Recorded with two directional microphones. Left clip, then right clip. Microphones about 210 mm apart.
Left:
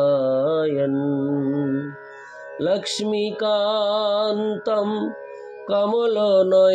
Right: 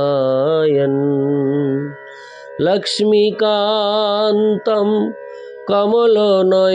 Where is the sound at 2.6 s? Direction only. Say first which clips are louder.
Right 7 dB; 40° right (ahead or behind).